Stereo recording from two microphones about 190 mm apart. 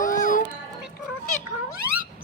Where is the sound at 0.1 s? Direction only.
45° left (ahead or behind).